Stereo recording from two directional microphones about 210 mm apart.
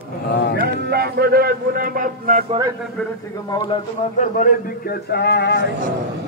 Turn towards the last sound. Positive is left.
turn(degrees=50)  # may be behind; listen again after turning